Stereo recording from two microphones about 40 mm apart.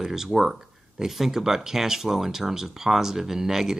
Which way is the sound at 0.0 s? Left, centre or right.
Centre.